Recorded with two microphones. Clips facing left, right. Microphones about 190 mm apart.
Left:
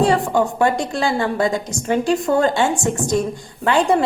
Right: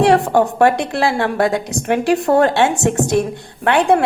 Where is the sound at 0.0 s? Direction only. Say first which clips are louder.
Right 3 dB; 70° right (ahead or behind).